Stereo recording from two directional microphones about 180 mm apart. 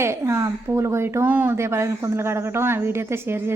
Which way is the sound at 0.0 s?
15° right (ahead or behind).